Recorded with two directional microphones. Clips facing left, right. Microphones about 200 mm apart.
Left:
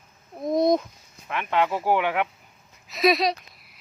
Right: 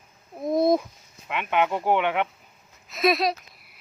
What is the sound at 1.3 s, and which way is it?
Speech, 15° right (ahead or behind).